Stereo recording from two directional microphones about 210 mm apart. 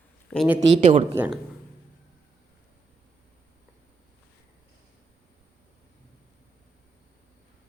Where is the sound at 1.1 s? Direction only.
5° right (ahead or behind).